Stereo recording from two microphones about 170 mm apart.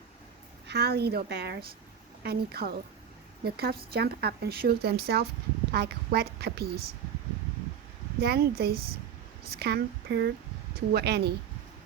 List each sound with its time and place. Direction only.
0.7 s a woman's voice: 70° right (ahead or behind)
8.2 s speech: 65° right (ahead or behind)